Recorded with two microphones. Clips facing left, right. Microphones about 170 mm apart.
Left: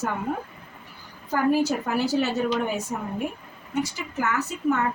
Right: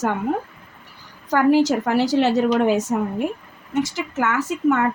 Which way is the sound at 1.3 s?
90° right.